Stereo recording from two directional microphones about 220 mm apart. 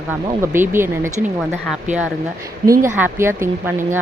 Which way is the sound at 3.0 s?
10° right (ahead or behind).